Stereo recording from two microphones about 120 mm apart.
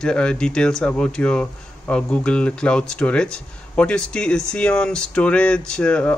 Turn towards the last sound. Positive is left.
turn(degrees=10)  # may be behind; listen again after turning